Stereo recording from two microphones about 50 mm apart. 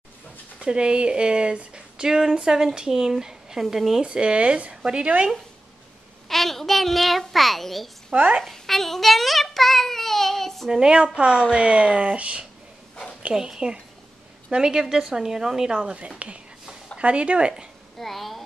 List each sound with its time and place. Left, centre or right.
0.6 s a child's voice: centre
4.0 s speech: centre
6.2 s a child's voice: centre
8.1 s speech: right
8.4 s child singing: centre
10.7 s speech: centre
17.9 s a child's voice: centre